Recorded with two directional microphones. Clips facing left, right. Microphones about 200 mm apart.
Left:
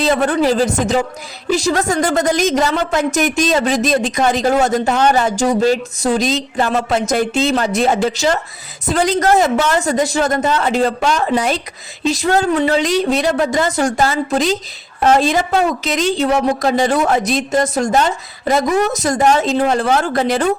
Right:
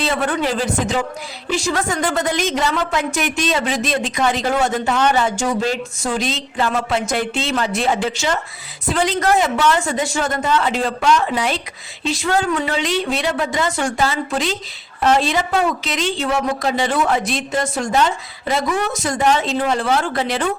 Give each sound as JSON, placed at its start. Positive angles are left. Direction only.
{"t": 0.0, "sound": "a woman's voice", "side_deg": 40}